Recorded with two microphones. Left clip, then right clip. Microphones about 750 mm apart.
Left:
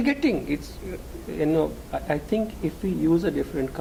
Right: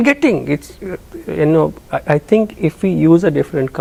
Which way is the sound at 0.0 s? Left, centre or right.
Right.